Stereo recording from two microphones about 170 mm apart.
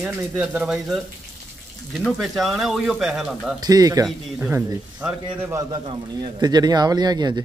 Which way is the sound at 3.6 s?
20° right (ahead or behind).